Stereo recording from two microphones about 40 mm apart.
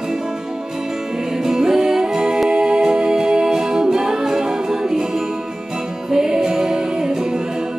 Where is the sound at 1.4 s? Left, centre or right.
Centre.